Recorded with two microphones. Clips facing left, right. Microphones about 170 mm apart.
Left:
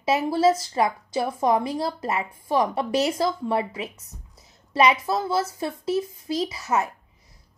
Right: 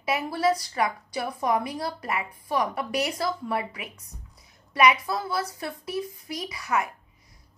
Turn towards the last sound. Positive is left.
turn(degrees=25)  # may be behind; listen again after turning